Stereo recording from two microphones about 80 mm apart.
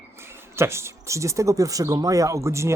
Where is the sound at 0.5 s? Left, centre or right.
Right.